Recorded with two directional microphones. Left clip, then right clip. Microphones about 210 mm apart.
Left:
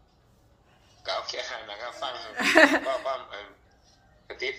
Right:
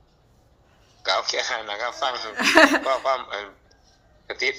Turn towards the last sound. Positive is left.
turn(degrees=-50)  # may be behind; listen again after turning